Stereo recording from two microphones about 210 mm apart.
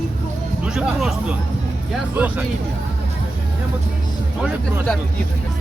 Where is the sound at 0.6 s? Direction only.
Centre (ahead or behind).